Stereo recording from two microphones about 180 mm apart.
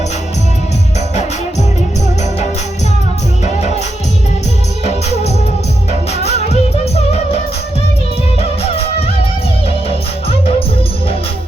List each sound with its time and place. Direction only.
6.5 s music: 35° left (ahead or behind)
8.4 s music: 35° left (ahead or behind)